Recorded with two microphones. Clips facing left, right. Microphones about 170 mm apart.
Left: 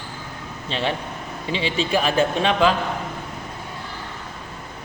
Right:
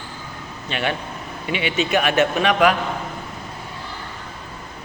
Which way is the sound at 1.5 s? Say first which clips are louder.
Right 1 dB; 30° left (ahead or behind).